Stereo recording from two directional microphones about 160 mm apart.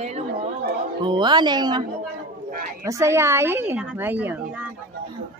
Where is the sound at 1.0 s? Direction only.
30° right (ahead or behind); by 4.6 s 5° right (ahead or behind).